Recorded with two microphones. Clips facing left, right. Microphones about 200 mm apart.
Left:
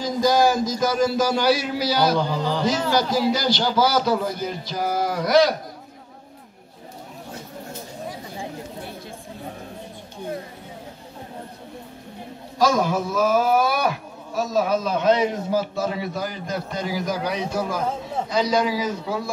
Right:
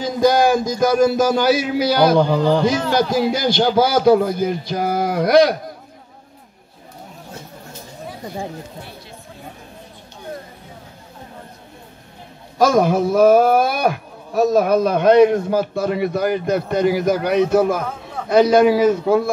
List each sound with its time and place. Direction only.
0.0 s speech: 60° right (ahead or behind)
12.5 s speech: 60° right (ahead or behind)